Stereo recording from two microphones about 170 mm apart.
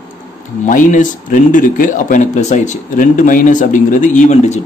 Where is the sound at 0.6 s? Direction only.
50° left (ahead or behind).